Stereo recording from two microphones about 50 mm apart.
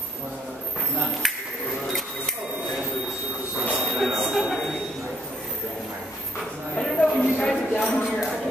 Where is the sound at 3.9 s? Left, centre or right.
Centre.